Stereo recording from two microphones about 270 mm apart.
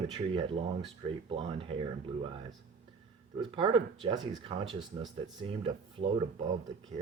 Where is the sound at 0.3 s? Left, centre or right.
Centre.